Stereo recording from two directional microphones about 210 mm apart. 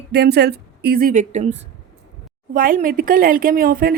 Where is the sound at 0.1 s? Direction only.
50° right (ahead or behind).